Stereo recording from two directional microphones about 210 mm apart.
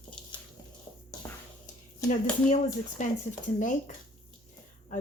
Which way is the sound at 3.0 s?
35° left (ahead or behind).